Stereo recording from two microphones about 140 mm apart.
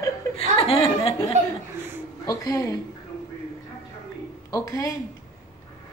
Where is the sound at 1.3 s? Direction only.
55° right (ahead or behind).